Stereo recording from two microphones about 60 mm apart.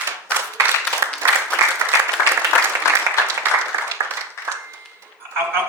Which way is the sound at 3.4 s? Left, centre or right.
Right.